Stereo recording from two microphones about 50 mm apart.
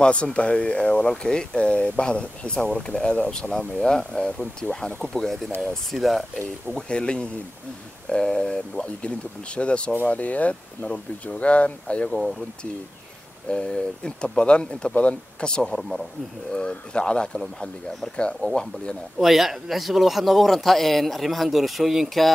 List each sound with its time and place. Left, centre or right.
0.0 s speech: left
5.0 s speech: centre
6.9 s speech: centre
9.6 s speech: left
12.1 s speech: centre
13.5 s speech: centre
15.7 s speech: centre
16.5 s speech: centre
19.1 s speech: centre